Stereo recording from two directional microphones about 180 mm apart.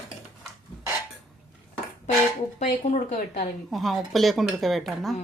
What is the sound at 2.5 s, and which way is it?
Speech, 40° left (ahead or behind).